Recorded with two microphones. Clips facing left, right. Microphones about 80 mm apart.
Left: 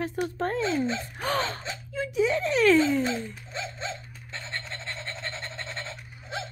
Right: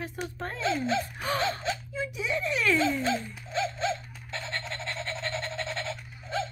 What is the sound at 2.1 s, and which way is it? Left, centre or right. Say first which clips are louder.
Speech: left 7 dB; left.